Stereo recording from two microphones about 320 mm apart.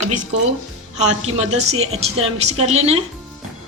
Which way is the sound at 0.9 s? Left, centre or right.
Centre.